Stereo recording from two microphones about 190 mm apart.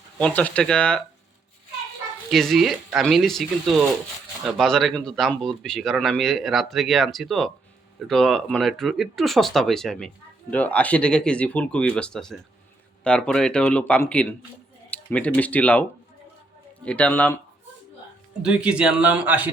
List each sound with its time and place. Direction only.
0.2 s speech: 5° left (ahead or behind)
2.3 s speech: centre (ahead or behind)
18.4 s speech: 5° right (ahead or behind)